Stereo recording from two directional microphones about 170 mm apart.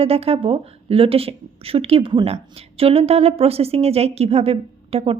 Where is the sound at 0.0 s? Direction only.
35° right (ahead or behind).